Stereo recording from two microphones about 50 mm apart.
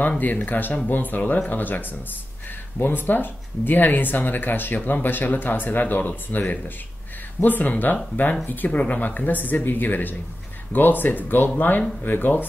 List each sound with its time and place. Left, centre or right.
0.2 s speech: left